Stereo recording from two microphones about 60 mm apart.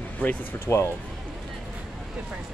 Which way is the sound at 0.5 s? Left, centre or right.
Left.